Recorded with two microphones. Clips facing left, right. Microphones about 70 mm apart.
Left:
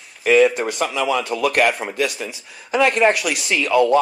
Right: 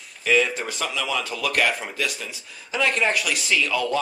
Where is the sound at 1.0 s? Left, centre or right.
Left.